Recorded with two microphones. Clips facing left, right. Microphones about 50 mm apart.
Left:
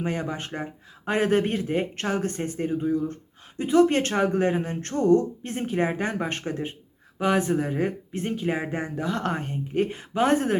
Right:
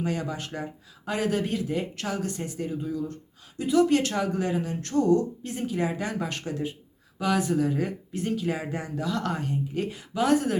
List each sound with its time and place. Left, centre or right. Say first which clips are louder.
0.0 s speech: left 1 dB; left